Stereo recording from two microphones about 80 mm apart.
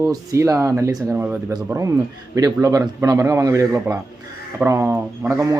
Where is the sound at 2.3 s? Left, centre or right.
Right.